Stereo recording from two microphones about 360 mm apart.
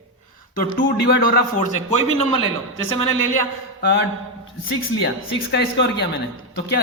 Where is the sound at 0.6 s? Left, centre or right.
Left.